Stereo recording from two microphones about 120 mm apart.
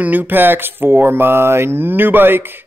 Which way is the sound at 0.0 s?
15° right (ahead or behind).